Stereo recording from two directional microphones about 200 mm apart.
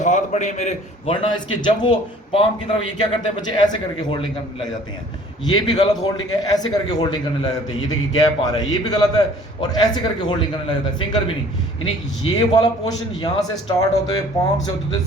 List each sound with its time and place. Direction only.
0.0 s a man's voice: 35° left (ahead or behind)
5.5 s a man's voice: 20° left (ahead or behind)
12.2 s a man's voice: 20° left (ahead or behind)